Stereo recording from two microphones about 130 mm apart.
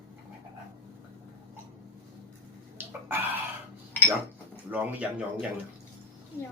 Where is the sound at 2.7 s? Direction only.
15° right (ahead or behind).